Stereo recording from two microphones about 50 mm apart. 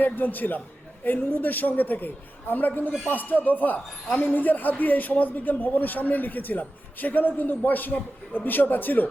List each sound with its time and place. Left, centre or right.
0.0 s a man's voice: left